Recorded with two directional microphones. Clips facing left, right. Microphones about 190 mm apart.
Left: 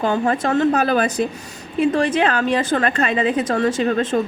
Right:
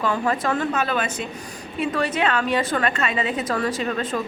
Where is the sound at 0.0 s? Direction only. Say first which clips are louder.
Left 4 dB; 30° left (ahead or behind).